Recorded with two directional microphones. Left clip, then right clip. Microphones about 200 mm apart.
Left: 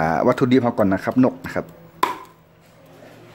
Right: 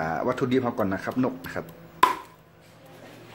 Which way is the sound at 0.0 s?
50° left (ahead or behind).